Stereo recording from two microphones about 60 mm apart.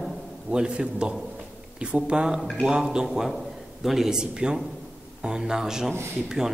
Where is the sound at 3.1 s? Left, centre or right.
Centre.